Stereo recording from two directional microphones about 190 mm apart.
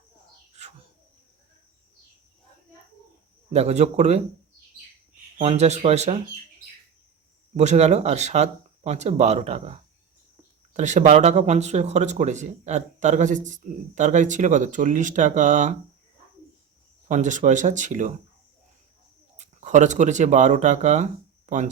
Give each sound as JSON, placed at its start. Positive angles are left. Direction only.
{"t": 3.5, "sound": "speech", "side_deg": -35}
{"t": 5.4, "sound": "speech", "side_deg": -35}
{"t": 7.5, "sound": "speech", "side_deg": -35}
{"t": 17.1, "sound": "speech", "side_deg": -40}
{"t": 19.4, "sound": "speech", "side_deg": -40}